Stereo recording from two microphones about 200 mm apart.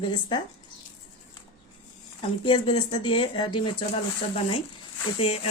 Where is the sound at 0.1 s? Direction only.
20° left (ahead or behind).